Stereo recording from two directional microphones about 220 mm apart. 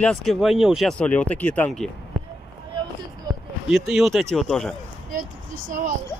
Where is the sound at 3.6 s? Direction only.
Centre (ahead or behind).